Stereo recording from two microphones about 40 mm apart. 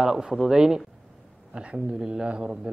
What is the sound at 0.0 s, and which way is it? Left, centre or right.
Speech, centre.